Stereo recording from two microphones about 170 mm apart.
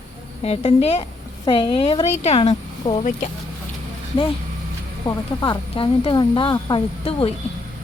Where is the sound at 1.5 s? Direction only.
30° left (ahead or behind).